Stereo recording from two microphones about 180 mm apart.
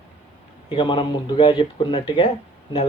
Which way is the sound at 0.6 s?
25° left (ahead or behind).